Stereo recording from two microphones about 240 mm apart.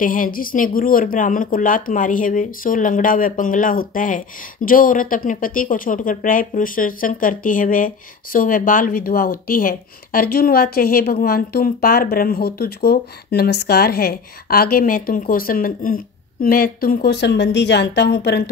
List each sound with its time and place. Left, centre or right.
0.0 s speech: left